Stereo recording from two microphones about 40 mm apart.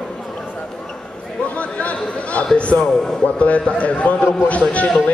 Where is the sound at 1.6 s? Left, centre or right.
Left.